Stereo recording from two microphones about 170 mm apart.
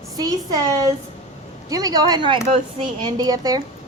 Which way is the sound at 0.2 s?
20° right (ahead or behind).